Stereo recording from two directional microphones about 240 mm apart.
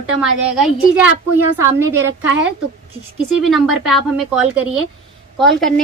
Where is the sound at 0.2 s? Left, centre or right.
Centre.